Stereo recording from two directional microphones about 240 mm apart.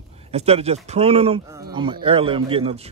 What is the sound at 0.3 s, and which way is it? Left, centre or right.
A man's voice, right.